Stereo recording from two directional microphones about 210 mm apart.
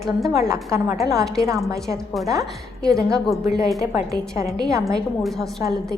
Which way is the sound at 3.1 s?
Centre (ahead or behind).